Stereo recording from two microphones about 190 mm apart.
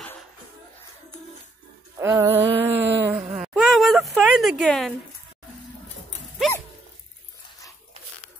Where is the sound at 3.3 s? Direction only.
Centre (ahead or behind).